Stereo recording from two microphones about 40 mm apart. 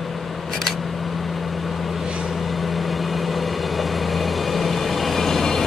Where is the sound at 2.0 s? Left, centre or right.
Right.